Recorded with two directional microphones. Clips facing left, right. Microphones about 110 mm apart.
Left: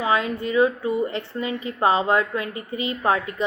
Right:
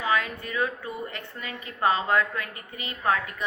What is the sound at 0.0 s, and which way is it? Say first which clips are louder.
A woman's voice: left 5 dB; 25° left (ahead or behind).